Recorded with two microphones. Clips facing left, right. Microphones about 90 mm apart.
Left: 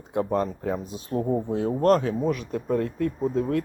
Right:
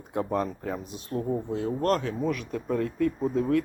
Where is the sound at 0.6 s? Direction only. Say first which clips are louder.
Left 4 dB; 20° left (ahead or behind).